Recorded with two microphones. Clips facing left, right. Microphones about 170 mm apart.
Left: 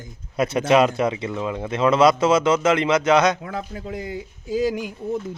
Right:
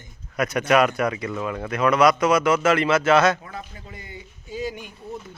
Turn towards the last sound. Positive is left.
turn(degrees=90)